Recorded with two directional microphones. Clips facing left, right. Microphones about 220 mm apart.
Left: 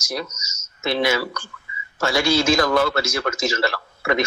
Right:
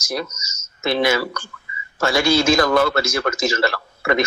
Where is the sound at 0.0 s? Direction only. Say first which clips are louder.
Right 3 dB; 55° right (ahead or behind).